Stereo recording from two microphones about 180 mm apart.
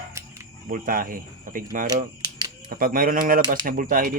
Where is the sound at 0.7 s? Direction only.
50° right (ahead or behind).